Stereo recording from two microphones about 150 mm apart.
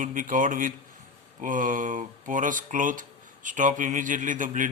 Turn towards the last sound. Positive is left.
turn(degrees=-60)  # may be behind; listen again after turning